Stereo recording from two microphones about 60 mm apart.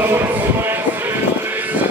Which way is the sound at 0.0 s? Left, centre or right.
Right.